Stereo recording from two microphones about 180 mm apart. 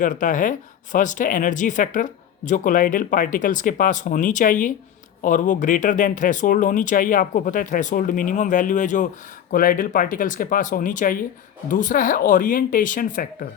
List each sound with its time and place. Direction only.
0.0 s speech: 45° left (ahead or behind)